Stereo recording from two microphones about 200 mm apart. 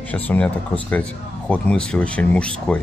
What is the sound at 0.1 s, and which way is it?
Speech, 5° left (ahead or behind).